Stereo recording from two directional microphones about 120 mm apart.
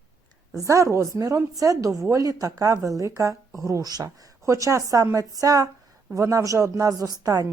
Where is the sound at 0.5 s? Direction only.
25° right (ahead or behind).